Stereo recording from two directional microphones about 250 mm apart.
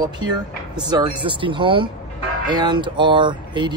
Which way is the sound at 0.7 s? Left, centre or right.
Centre.